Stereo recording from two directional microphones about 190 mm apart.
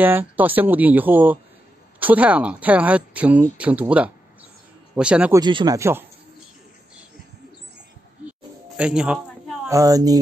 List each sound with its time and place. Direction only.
0.0 s speech: 10° right (ahead or behind)
5.4 s speech: 25° right (ahead or behind)
8.3 s a sound: 5° right (ahead or behind)
9.7 s speech: 20° right (ahead or behind)